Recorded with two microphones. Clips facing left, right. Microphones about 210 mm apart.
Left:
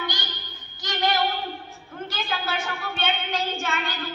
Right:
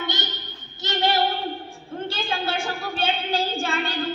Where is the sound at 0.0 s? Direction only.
25° right (ahead or behind).